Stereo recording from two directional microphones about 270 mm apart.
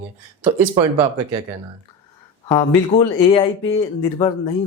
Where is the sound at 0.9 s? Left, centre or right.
Right.